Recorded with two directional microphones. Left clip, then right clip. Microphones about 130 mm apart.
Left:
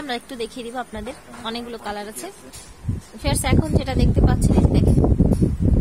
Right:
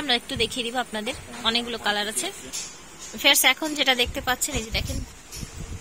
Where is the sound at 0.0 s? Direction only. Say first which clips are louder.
Right 4 dB; 15° left (ahead or behind).